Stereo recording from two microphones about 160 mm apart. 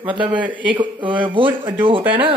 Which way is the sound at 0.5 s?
30° right (ahead or behind).